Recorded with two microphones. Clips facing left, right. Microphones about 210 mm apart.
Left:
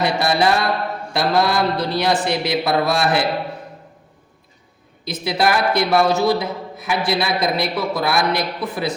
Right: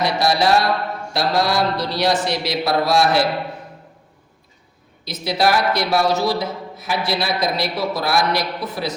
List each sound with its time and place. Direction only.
0.0 s speech: 55° left (ahead or behind)
5.0 s a man's voice: 55° left (ahead or behind)